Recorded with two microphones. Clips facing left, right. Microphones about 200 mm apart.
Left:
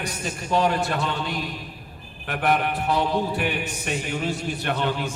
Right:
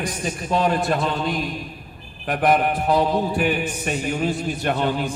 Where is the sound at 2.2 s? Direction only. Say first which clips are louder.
Right 4 dB; 45° right (ahead or behind).